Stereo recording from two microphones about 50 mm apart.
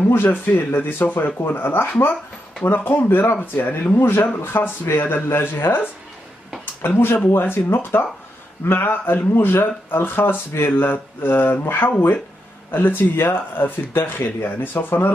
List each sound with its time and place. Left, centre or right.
0.0 s speech: left
3.9 s speech: left
6.6 s speech: left
12.7 s speech: left